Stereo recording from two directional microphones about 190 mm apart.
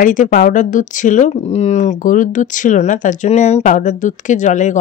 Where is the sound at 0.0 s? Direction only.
45° left (ahead or behind).